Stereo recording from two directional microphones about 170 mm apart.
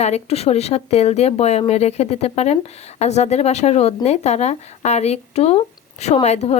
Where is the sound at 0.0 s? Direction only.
40° left (ahead or behind).